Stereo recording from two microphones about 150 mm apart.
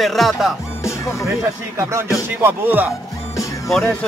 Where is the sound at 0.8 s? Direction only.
20° left (ahead or behind).